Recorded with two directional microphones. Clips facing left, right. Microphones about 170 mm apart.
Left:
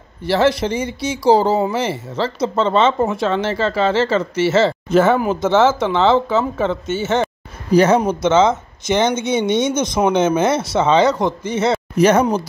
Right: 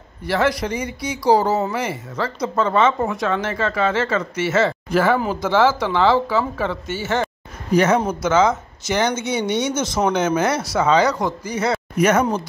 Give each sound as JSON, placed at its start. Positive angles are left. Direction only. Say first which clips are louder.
{"t": 0.2, "sound": "speech", "louder": "left 4 dB", "side_deg": 30}